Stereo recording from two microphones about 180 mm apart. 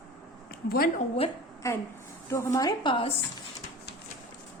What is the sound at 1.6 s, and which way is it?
A woman's voice, 15° left (ahead or behind).